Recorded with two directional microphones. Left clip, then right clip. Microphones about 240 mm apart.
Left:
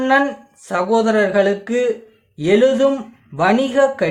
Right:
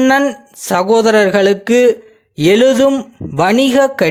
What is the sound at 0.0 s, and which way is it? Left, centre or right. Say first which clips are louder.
Speech: right 4 dB; right.